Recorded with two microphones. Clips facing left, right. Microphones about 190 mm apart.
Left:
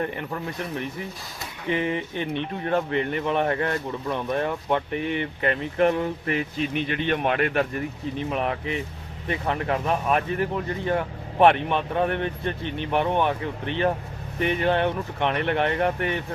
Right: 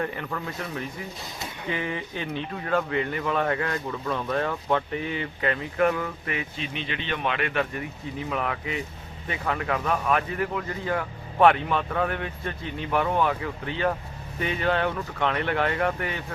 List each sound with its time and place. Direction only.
0.0 s speech: 20° left (ahead or behind)
6.2 s speech: 45° left (ahead or behind)
8.3 s speech: 20° left (ahead or behind)